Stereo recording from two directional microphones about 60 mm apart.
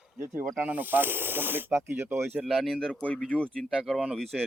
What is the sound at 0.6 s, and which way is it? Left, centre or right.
Speech, right.